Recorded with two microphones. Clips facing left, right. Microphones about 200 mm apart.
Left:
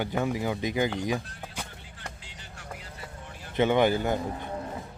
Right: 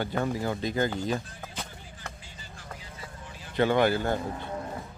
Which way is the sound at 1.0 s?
15° left (ahead or behind).